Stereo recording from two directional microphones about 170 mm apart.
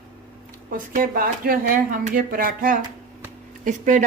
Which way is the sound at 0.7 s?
55° right (ahead or behind).